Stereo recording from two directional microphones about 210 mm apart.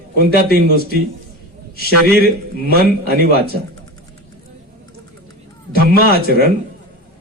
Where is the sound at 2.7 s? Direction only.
45° right (ahead or behind).